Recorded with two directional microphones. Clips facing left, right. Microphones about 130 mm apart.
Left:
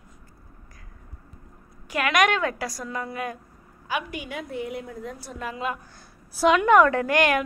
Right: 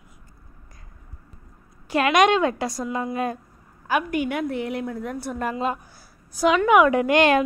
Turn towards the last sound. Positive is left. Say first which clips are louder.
# right 4 dB
turn(degrees=-25)  # may be behind; listen again after turning